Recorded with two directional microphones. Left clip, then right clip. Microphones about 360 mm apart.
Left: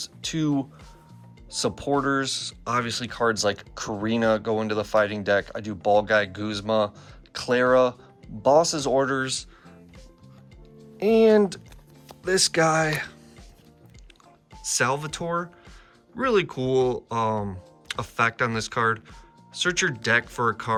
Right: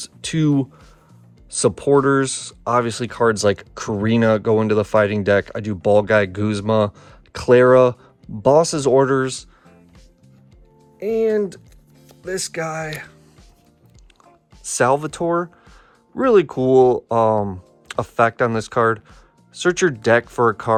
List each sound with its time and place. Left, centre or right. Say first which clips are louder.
0.0 s speech: right 6 dB; centre
10.9 s speech: left 1 dB; centre
14.6 s speech: right 7 dB; centre